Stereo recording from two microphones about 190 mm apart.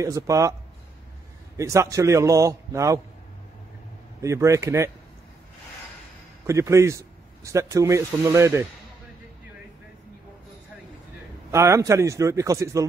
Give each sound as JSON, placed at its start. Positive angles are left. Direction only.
{"t": 0.0, "sound": "speech", "side_deg": -15}
{"t": 1.6, "sound": "speech", "side_deg": -15}
{"t": 4.2, "sound": "speech", "side_deg": -15}
{"t": 6.4, "sound": "speech", "side_deg": -15}
{"t": 11.5, "sound": "speech", "side_deg": -15}